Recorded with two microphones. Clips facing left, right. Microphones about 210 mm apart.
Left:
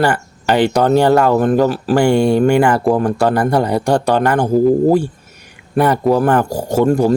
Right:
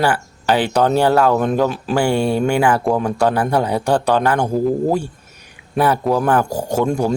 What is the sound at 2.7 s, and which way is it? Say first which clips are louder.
Speech: left 3 dB; 5° left (ahead or behind).